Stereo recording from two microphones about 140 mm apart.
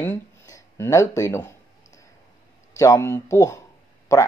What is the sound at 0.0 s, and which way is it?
Speech, 15° left (ahead or behind).